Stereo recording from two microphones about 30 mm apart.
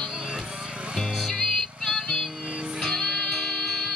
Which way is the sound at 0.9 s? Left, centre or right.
Centre.